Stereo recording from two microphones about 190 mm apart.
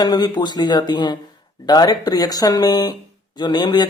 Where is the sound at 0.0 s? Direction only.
20° left (ahead or behind).